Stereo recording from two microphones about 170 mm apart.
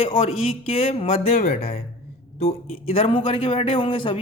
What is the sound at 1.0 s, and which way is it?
Speech, 50° left (ahead or behind).